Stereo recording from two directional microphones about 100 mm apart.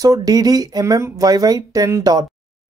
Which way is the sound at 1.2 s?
40° right (ahead or behind).